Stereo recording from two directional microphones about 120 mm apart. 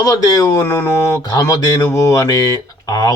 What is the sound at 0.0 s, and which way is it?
Speech, 30° left (ahead or behind).